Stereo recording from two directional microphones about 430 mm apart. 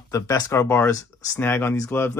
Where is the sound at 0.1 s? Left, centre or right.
Centre.